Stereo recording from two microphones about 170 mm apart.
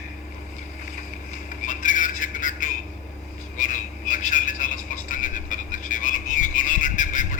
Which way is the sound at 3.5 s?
50° left (ahead or behind).